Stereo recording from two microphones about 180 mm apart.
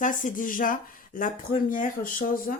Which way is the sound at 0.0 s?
45° left (ahead or behind).